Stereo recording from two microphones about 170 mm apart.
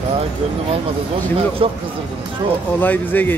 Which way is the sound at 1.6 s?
35° right (ahead or behind).